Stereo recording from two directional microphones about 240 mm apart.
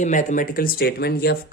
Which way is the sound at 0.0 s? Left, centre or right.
Left.